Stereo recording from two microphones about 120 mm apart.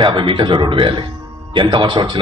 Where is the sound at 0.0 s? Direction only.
45° right (ahead or behind).